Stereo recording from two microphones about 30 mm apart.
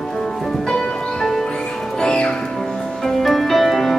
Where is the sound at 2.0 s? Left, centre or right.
Left.